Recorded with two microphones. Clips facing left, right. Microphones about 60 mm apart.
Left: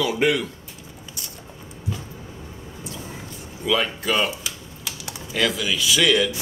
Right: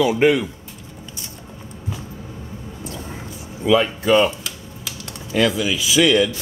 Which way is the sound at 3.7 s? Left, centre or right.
Centre.